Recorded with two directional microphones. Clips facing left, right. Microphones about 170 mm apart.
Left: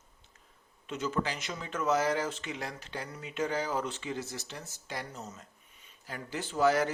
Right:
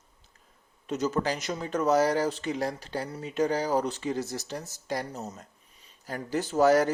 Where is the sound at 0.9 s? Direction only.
40° right (ahead or behind).